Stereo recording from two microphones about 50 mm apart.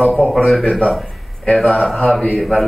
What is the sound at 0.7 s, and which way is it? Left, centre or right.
Speech, centre.